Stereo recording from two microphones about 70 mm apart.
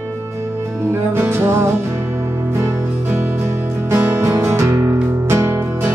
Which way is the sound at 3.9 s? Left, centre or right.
Right.